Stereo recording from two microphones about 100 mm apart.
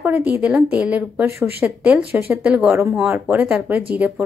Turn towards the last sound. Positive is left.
turn(degrees=-15)  # may be behind; listen again after turning